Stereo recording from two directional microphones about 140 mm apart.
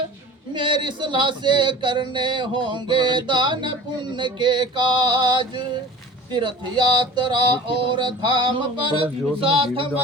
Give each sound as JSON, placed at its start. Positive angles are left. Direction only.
{"t": 0.5, "sound": "speech", "side_deg": -35}
{"t": 6.9, "sound": "speech", "side_deg": -35}